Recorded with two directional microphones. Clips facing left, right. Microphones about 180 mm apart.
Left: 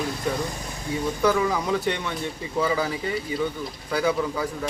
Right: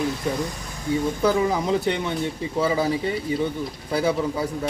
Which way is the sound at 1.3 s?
25° right (ahead or behind).